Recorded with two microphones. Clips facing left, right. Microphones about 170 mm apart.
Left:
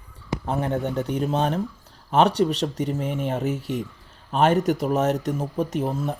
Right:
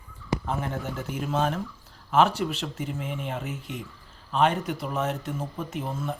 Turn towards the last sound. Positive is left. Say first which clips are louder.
# left 6 dB
turn(degrees=40)  # may be behind; listen again after turning